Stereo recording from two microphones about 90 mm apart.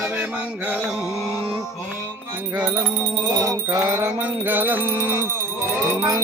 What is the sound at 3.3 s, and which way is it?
Music, 40° right (ahead or behind).